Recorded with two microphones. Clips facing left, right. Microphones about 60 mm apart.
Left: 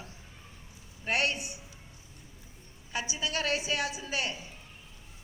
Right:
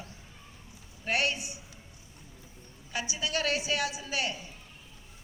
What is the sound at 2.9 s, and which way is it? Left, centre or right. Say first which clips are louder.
Speech: right 1 dB; left.